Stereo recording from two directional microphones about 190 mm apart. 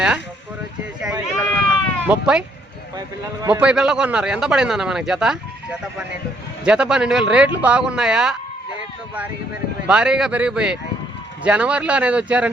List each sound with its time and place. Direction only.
1.3 s sheep: 5° right (ahead or behind)
3.4 s a man's voice: 5° right (ahead or behind)
6.7 s a man's voice: 5° right (ahead or behind)
9.8 s a man's voice: 5° right (ahead or behind)